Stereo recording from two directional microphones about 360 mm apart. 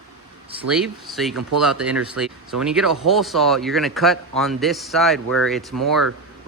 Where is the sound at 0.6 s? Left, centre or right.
Centre.